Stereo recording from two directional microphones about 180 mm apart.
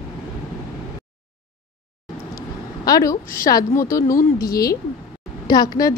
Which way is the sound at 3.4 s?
20° left (ahead or behind).